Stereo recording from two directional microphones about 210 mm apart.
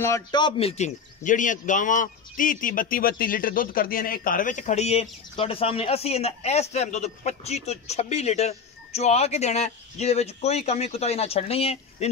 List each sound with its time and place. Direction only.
0.0 s speech: 15° left (ahead or behind)